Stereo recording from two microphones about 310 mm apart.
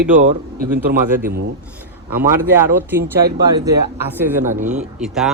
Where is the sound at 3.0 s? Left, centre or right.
Right.